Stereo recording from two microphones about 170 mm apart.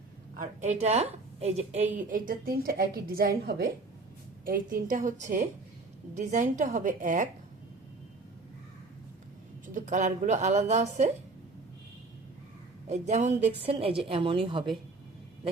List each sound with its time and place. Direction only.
0.3 s a woman's voice: 45° right (ahead or behind)
2.0 s a woman's voice: 55° right (ahead or behind)
9.7 s a woman's voice: 45° right (ahead or behind)
12.9 s a woman's voice: 45° right (ahead or behind)